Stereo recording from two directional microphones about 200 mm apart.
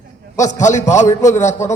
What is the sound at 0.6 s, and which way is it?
A man's voice, 35° left (ahead or behind).